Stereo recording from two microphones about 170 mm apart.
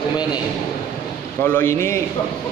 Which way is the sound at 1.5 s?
15° left (ahead or behind).